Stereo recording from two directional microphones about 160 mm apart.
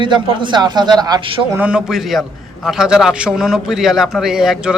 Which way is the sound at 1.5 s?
5° right (ahead or behind).